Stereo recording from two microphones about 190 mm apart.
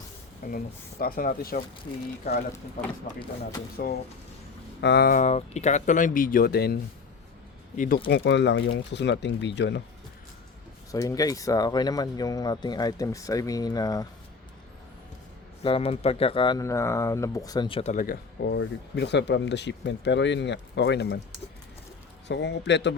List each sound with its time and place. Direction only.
0.5 s speech: 50° left (ahead or behind)
4.8 s speech: 60° left (ahead or behind)
5.1 s speech: 35° left (ahead or behind); by 6.7 s 55° left (ahead or behind)
7.8 s speech: 50° left (ahead or behind); by 9.8 s 65° left (ahead or behind)
10.9 s speech: 20° left (ahead or behind)
15.6 s speech: 30° left (ahead or behind)
17.9 s speech: 50° left (ahead or behind)
22.3 s speech: 65° left (ahead or behind)